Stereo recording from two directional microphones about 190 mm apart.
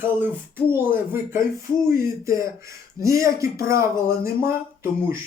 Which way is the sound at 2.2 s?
15° right (ahead or behind).